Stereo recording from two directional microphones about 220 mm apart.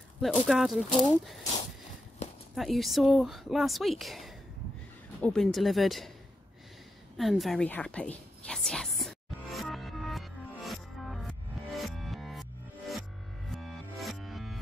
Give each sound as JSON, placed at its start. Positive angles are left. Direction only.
{"t": 0.2, "sound": "speech", "side_deg": 0}
{"t": 2.2, "sound": "horse", "side_deg": 30}
{"t": 2.5, "sound": "speech", "side_deg": 0}
{"t": 7.2, "sound": "a sound", "side_deg": 0}
{"t": 13.5, "sound": "music", "side_deg": 0}